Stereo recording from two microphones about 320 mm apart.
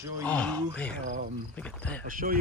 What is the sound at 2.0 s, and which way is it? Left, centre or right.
Speech, right.